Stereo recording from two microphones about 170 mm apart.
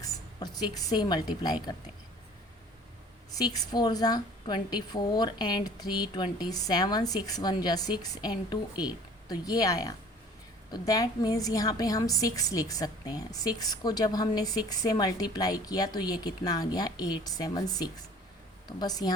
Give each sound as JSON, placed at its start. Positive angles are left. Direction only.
{"t": 0.0, "sound": "a woman's voice", "side_deg": 25}
{"t": 3.3, "sound": "a woman's voice", "side_deg": 25}